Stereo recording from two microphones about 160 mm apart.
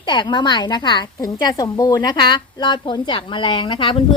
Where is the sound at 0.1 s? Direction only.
30° left (ahead or behind).